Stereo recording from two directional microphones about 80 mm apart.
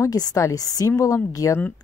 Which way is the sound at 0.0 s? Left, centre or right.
Left.